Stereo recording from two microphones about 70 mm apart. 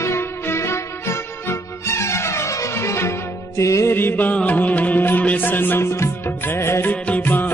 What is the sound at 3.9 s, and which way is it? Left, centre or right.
Music, left.